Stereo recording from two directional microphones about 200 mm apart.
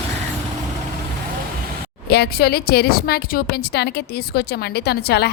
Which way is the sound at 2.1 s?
55° left (ahead or behind).